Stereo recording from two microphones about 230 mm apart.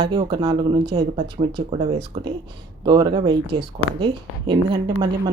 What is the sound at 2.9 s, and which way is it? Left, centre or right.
A woman's voice, centre.